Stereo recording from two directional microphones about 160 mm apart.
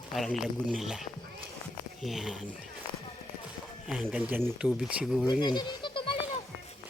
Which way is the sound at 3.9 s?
10° right (ahead or behind).